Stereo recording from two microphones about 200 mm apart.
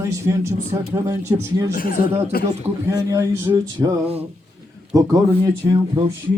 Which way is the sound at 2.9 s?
15° right (ahead or behind).